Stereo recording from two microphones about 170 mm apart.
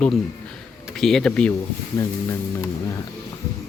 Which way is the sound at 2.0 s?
15° left (ahead or behind).